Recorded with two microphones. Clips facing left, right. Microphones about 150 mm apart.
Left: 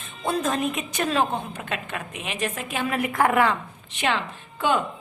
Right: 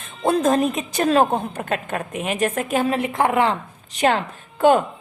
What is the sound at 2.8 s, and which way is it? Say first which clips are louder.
A woman's voice: left 2 dB; 25° right (ahead or behind).